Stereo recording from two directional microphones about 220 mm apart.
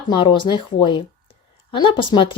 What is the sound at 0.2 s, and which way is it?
A woman's voice, 20° left (ahead or behind).